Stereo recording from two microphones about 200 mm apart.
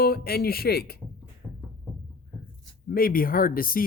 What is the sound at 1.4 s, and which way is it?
Music, 10° left (ahead or behind).